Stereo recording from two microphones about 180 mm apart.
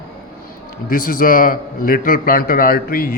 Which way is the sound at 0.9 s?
50° left (ahead or behind).